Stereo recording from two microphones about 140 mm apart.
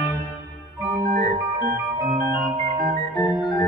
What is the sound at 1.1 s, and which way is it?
Organ, 30° left (ahead or behind).